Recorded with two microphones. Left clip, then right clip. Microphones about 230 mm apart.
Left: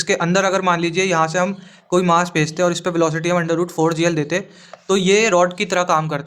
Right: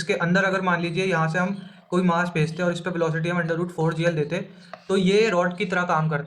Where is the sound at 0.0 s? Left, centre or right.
Left.